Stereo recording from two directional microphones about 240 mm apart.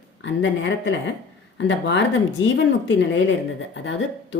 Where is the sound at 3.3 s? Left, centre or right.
Left.